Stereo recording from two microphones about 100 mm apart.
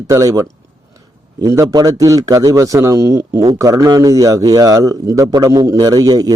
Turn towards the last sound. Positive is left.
turn(degrees=-40)  # may be behind; listen again after turning